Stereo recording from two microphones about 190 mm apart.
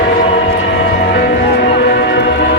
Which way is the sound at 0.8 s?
65° left (ahead or behind).